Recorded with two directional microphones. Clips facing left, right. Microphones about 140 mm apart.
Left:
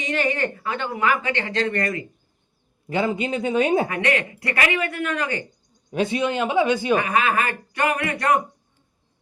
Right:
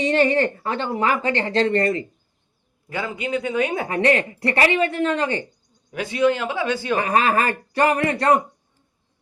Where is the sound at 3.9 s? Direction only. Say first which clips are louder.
Right 4 dB; 35° right (ahead or behind).